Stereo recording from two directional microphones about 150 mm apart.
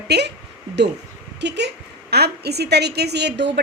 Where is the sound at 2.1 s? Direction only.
90° right.